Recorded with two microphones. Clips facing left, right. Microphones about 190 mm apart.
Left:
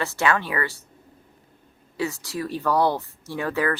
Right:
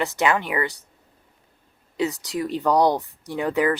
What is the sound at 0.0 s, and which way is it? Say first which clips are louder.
Speech: right 2 dB; 20° right (ahead or behind).